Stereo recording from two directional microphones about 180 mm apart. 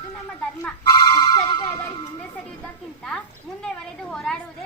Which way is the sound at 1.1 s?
25° left (ahead or behind).